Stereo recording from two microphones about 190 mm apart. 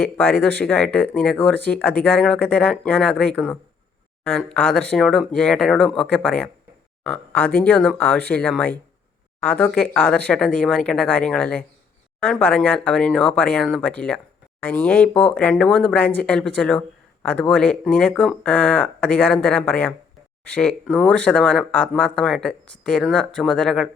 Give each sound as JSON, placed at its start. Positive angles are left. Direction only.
{"t": 0.6, "sound": "speech", "side_deg": 5}